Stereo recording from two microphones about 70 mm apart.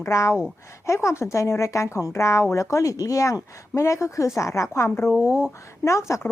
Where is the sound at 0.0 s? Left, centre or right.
Left.